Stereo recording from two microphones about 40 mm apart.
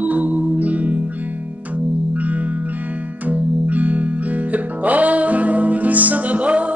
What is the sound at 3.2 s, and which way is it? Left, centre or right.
Music, right.